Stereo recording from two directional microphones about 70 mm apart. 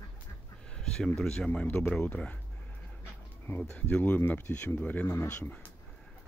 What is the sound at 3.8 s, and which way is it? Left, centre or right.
Speech, left.